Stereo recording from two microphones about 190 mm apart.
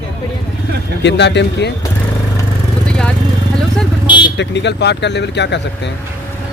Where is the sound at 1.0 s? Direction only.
65° left (ahead or behind).